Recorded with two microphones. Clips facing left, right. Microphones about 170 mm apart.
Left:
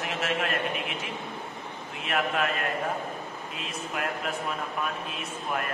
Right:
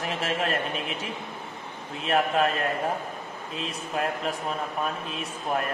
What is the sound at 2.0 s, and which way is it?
Speech, 35° right (ahead or behind).